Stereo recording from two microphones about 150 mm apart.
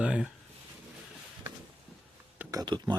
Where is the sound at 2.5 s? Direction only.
25° right (ahead or behind).